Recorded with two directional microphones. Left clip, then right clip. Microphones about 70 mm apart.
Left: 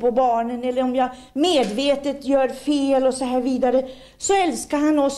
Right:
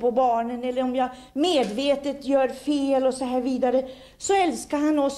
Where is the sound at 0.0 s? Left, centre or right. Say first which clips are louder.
Left 3 dB; right.